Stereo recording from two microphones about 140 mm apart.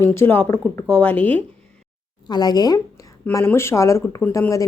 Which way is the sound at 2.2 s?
30° left (ahead or behind).